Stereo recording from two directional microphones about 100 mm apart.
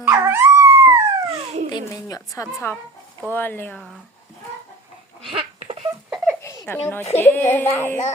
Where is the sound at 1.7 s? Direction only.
40° left (ahead or behind).